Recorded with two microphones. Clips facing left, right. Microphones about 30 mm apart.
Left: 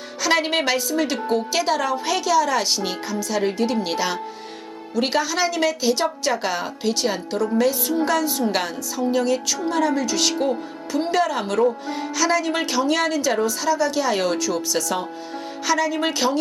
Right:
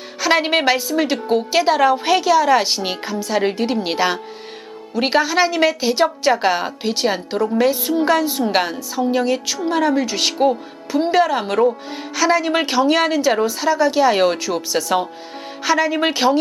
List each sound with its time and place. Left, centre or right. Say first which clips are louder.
0.2 s a woman's voice: right 4 dB; centre